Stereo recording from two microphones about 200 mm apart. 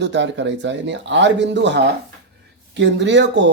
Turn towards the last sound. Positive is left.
turn(degrees=-60)  # may be behind; listen again after turning